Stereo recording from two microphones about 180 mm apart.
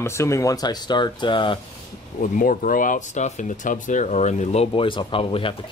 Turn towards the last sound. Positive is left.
turn(degrees=30)  # may be behind; listen again after turning